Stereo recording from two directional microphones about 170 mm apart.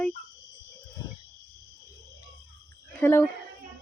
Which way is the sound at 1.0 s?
20° left (ahead or behind).